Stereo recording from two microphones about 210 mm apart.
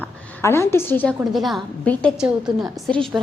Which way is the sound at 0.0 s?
10° left (ahead or behind).